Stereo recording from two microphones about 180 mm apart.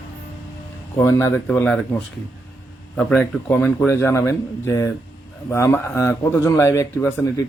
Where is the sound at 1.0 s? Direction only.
15° left (ahead or behind).